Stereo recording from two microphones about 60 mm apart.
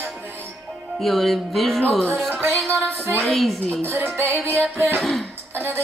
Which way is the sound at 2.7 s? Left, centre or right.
Right.